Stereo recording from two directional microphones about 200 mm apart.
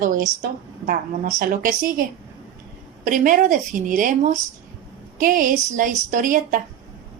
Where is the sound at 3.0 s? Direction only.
40° right (ahead or behind).